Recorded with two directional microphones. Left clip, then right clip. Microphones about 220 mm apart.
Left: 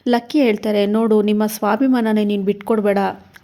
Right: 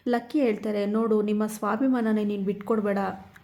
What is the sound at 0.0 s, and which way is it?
A woman's voice, 40° left (ahead or behind).